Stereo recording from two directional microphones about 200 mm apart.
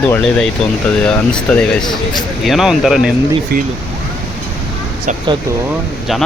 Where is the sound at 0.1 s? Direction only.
Centre (ahead or behind).